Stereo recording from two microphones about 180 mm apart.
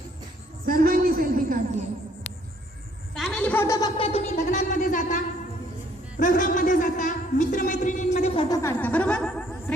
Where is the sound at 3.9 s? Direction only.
35° left (ahead or behind).